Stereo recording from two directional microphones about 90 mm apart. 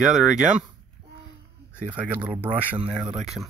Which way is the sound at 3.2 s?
5° right (ahead or behind).